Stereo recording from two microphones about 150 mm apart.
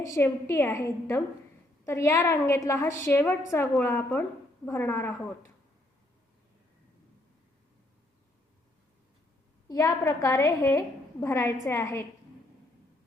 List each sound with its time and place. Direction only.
0.0 s a woman's voice: 20° left (ahead or behind)
9.6 s a woman's voice: 20° left (ahead or behind)